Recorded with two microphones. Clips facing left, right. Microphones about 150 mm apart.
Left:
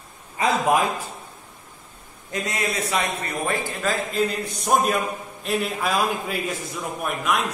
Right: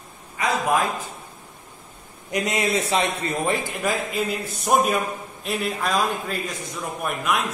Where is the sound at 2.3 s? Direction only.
20° right (ahead or behind).